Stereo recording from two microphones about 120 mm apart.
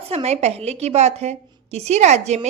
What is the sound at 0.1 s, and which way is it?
A woman's voice, 60° right (ahead or behind).